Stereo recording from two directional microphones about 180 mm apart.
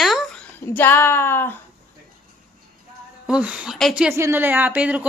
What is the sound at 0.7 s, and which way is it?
Speech, 10° left (ahead or behind).